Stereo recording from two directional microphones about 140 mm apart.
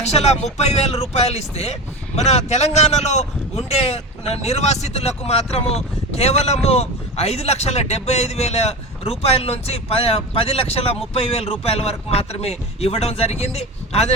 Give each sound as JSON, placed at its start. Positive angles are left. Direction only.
{"t": 0.0, "sound": "speech", "side_deg": 50}